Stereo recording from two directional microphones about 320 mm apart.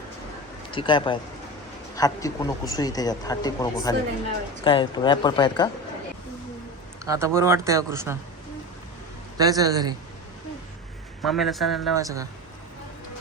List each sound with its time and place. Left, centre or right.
0.7 s speech: centre
7.0 s a man's voice: centre
9.4 s a man's voice: centre
11.3 s a man's voice: centre
11.9 s a man's voice: centre